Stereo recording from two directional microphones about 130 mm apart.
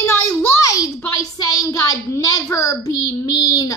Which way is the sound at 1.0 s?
25° left (ahead or behind).